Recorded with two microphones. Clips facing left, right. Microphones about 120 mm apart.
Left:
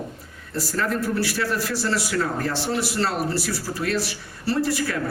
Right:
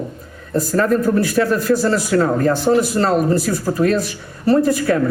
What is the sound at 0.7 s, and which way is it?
Speech, 40° right (ahead or behind).